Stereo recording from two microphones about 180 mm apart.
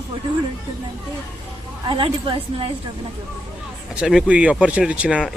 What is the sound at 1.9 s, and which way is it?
Speech, 30° right (ahead or behind).